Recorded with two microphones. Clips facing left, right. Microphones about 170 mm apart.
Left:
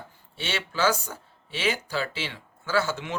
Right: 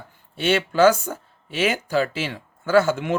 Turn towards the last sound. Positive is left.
turn(degrees=-50)  # may be behind; listen again after turning